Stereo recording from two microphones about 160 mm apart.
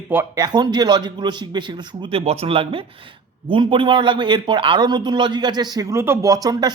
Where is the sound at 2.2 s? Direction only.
40° right (ahead or behind).